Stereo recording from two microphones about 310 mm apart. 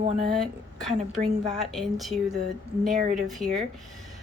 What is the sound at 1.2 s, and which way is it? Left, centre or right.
Speech, right.